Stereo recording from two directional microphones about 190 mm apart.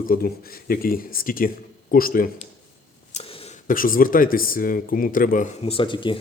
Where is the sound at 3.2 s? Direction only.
30° left (ahead or behind).